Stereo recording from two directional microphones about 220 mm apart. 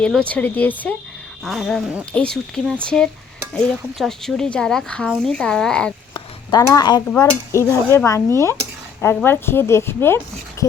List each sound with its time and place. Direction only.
0.0 s speech: 5° left (ahead or behind)
6.1 s a sound: 15° left (ahead or behind)
7.1 s speech: 10° left (ahead or behind)